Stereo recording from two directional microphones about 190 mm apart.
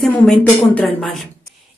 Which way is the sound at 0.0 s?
Centre (ahead or behind).